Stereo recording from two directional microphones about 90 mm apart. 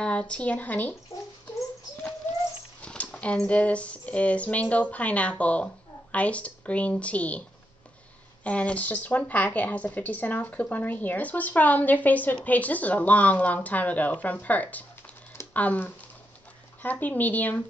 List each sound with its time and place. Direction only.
0.0 s speech: 15° left (ahead or behind)
2.8 s speech: 10° left (ahead or behind)
8.5 s a woman's voice: 15° left (ahead or behind)